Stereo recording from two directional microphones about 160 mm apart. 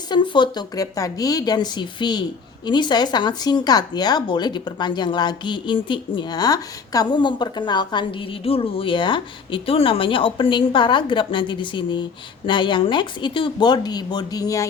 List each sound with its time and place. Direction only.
0.1 s speech: 30° left (ahead or behind)